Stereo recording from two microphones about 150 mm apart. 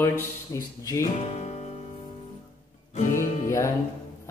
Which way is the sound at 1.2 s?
45° left (ahead or behind).